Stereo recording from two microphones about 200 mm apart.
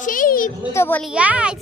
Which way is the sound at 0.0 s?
40° left (ahead or behind).